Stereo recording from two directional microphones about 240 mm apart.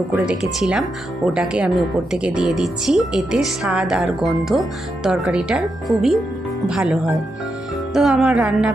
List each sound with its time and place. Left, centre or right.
0.3 s speech: centre